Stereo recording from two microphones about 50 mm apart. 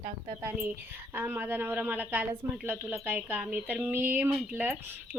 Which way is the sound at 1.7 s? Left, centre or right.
Right.